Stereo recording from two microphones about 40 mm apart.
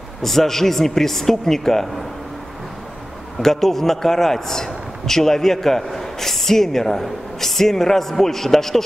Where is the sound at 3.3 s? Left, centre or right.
Centre.